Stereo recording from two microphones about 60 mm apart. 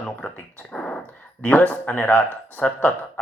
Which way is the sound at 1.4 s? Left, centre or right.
Left.